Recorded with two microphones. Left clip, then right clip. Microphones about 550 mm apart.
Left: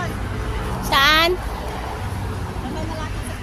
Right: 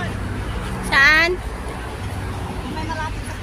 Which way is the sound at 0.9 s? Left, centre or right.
Left.